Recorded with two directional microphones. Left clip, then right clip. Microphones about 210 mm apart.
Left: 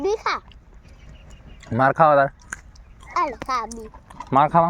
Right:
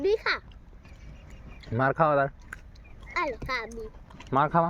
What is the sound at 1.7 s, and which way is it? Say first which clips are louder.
Speech: left 8 dB; 55° left (ahead or behind).